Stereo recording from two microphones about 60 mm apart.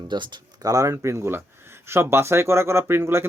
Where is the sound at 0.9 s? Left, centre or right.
Right.